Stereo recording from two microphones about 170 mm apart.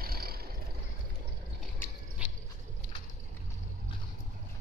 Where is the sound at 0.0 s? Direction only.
60° right (ahead or behind).